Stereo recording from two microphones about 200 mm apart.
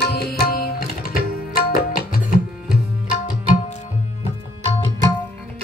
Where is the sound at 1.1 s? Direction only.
45° left (ahead or behind).